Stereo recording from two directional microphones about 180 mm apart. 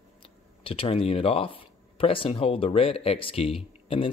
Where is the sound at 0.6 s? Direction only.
30° left (ahead or behind).